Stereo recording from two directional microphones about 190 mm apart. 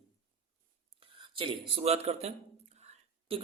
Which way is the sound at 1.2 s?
25° right (ahead or behind).